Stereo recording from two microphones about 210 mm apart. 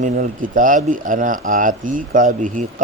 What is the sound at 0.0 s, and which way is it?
Speech, 40° right (ahead or behind).